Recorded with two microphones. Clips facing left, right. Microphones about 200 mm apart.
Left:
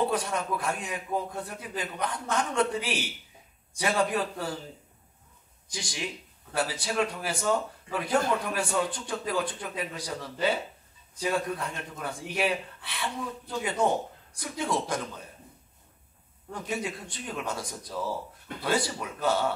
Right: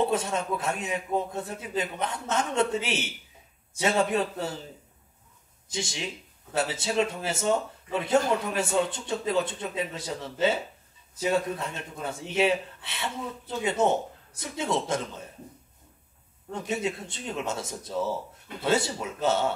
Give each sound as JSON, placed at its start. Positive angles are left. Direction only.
{"t": 0.0, "sound": "a man's voice", "side_deg": -25}
{"t": 5.7, "sound": "a man's voice", "side_deg": -25}
{"t": 16.5, "sound": "a man's voice", "side_deg": -25}